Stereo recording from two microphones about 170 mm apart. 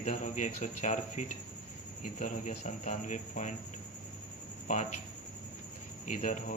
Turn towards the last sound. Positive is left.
turn(degrees=45)  # may be behind; listen again after turning